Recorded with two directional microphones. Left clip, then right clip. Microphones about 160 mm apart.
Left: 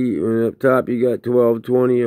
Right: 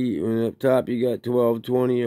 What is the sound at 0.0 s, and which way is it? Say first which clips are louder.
Speech: left 5 dB; 15° right (ahead or behind).